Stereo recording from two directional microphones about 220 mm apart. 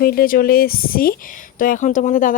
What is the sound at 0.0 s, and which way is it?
Speech, 45° left (ahead or behind).